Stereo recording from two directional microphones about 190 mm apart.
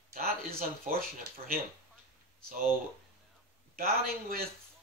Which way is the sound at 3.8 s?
50° right (ahead or behind).